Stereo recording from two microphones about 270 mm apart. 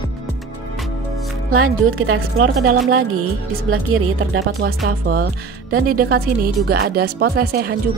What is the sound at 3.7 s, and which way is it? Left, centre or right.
Speech, right.